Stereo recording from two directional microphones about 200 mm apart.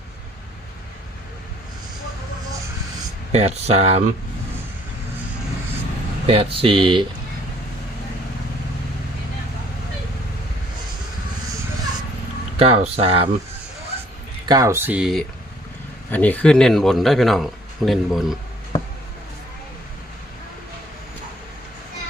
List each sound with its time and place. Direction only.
3.3 s speech: 30° right (ahead or behind)
6.2 s speech: 25° right (ahead or behind)
12.5 s speech: 30° right (ahead or behind)
14.4 s speech: 20° right (ahead or behind)
16.1 s a man's voice: 5° left (ahead or behind)